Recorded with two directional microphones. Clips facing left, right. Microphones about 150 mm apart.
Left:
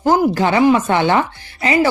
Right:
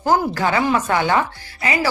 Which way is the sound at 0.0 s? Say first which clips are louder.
Left 4 dB; 20° left (ahead or behind).